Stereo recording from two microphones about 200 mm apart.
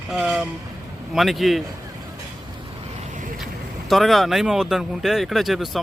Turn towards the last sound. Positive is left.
turn(degrees=0)  # may be behind; listen again after turning